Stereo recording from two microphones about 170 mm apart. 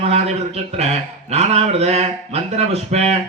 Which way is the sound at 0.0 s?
40° right (ahead or behind).